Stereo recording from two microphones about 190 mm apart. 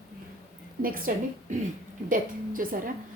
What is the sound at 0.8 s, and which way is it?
A woman's voice, 50° right (ahead or behind).